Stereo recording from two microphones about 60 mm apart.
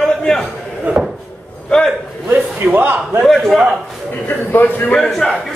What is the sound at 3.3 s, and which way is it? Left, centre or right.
Speech, centre.